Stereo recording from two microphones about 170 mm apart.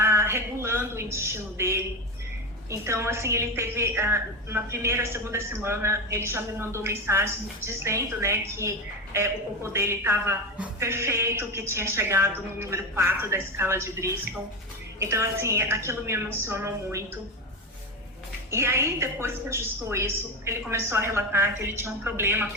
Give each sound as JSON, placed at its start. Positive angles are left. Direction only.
{"t": 0.0, "sound": "a sound", "side_deg": -15}
{"t": 1.1, "sound": "a man's voice", "side_deg": -15}
{"t": 9.7, "sound": "a man's voice", "side_deg": -15}
{"t": 18.5, "sound": "a man's voice", "side_deg": -15}